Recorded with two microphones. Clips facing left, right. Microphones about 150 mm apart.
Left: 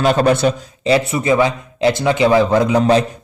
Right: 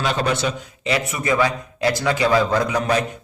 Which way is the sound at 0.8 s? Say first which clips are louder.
Left 7 dB; 30° left (ahead or behind).